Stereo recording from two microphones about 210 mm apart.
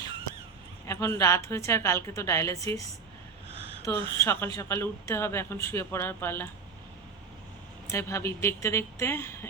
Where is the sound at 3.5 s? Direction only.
25° right (ahead or behind).